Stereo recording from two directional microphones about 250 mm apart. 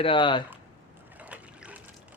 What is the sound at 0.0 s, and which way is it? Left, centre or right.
Speech, centre.